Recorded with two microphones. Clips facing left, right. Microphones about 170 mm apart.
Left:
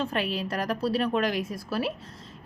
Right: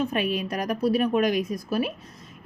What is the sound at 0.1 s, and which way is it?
A woman's voice, 15° right (ahead or behind).